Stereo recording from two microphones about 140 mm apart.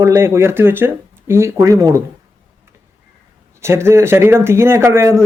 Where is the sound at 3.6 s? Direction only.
20° right (ahead or behind).